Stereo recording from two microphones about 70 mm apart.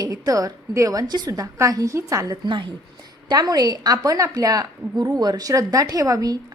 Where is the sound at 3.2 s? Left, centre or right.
Right.